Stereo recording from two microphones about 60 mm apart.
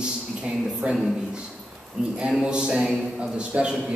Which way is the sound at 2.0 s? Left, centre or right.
Centre.